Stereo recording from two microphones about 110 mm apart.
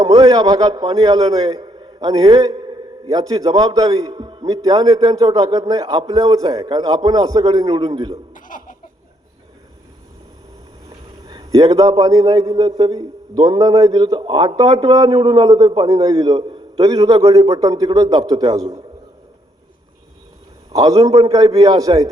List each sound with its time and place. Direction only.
0.2 s a man's voice: 40° right (ahead or behind)
4.1 s a man's voice: 50° right (ahead or behind)
4.4 s a man's voice: 35° right (ahead or behind)
11.3 s a man's voice: 40° right (ahead or behind)
20.7 s a man's voice: 35° right (ahead or behind)